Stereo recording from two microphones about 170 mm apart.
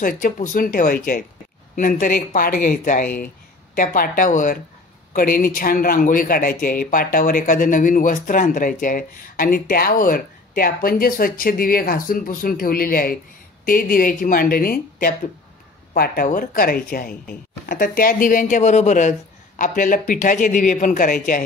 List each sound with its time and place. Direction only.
0.0 s a man's voice: 55° left (ahead or behind)